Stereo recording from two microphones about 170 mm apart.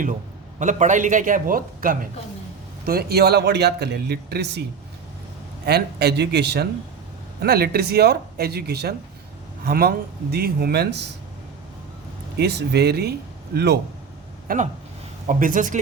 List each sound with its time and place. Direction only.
0.6 s a man's voice: 45° right (ahead or behind)
2.8 s a man's voice: 65° right (ahead or behind)
5.6 s a man's voice: 75° right (ahead or behind)
12.4 s speech: 75° right (ahead or behind)
14.4 s a man's voice: 50° right (ahead or behind)